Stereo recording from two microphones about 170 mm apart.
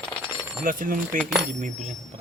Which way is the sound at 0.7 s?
55° right (ahead or behind).